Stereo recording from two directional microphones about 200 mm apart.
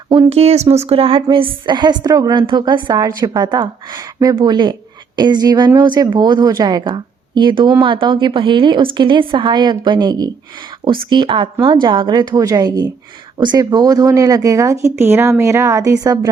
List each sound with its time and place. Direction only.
0.1 s speech: 30° right (ahead or behind)